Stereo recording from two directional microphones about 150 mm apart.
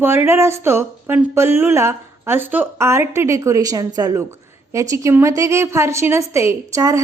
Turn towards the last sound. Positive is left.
turn(degrees=-20)  # may be behind; listen again after turning